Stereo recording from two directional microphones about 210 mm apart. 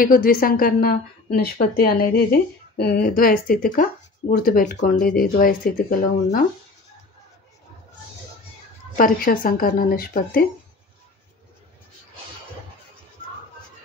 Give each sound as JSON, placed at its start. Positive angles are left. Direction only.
{"t": 0.0, "sound": "a woman's voice", "side_deg": 40}
{"t": 8.9, "sound": "a woman's voice", "side_deg": 40}